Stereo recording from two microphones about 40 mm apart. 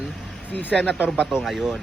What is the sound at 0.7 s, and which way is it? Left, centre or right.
Speech, right.